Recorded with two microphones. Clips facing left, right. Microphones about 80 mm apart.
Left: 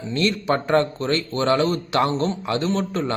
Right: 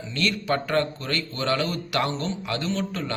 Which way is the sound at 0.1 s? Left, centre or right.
Left.